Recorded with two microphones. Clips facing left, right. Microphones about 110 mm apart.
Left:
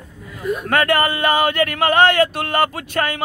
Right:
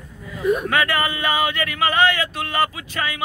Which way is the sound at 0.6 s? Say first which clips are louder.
Left 4 dB; 50° left (ahead or behind).